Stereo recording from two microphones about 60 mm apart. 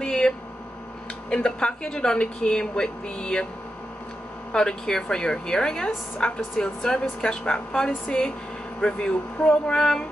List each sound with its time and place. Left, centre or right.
0.0 s a sound: centre
1.3 s a woman's voice: centre
4.5 s a woman's voice: centre